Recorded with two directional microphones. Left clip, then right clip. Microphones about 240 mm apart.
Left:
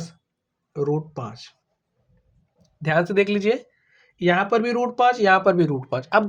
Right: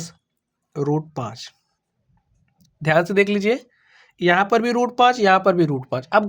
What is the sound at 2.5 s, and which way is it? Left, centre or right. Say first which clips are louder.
Speech: right 3 dB; right.